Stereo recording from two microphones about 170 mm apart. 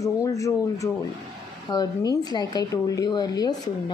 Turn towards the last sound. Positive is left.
turn(degrees=25)  # may be behind; listen again after turning